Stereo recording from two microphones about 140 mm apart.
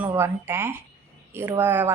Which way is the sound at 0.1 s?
15° right (ahead or behind).